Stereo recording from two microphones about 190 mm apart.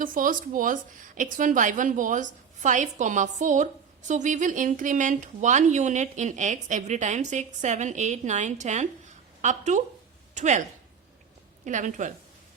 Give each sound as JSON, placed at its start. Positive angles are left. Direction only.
{"t": 0.0, "sound": "a woman's voice", "side_deg": -45}
{"t": 11.6, "sound": "speech", "side_deg": -40}